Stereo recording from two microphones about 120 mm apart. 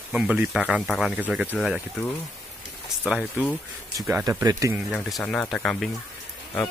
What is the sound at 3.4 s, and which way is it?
Speech, 10° right (ahead or behind).